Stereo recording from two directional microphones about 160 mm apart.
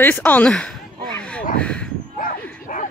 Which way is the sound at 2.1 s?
60° left (ahead or behind).